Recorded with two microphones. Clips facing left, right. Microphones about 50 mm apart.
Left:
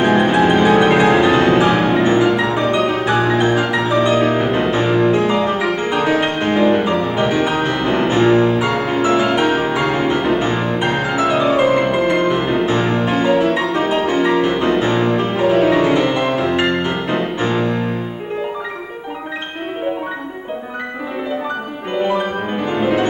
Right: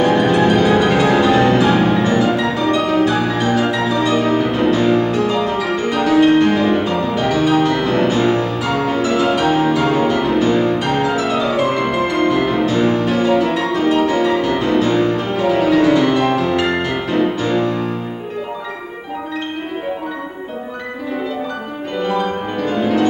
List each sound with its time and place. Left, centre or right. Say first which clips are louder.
0.0 s music: even; left
22.0 s music: even; left